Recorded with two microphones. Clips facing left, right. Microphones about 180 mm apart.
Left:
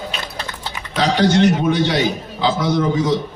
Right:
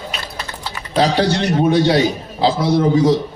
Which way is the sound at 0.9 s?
35° right (ahead or behind).